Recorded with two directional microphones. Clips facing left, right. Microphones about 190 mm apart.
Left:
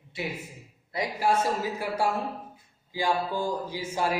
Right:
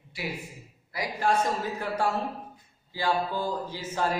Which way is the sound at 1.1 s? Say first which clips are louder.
Even; 10° left (ahead or behind).